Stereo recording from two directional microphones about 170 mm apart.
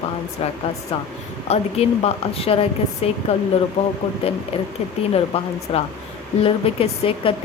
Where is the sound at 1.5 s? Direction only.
40° left (ahead or behind).